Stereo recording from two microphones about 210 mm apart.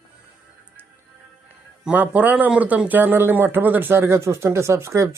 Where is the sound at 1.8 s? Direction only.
10° right (ahead or behind).